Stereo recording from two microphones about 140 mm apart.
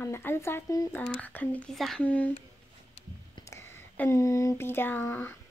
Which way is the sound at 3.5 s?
15° left (ahead or behind).